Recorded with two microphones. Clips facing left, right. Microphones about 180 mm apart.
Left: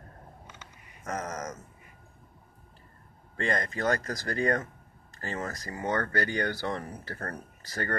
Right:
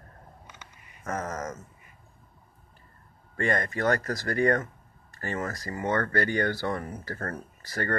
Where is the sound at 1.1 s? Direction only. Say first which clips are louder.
Right 2 dB; 15° left (ahead or behind).